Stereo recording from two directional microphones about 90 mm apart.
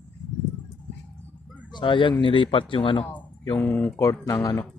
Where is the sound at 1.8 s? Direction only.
65° left (ahead or behind).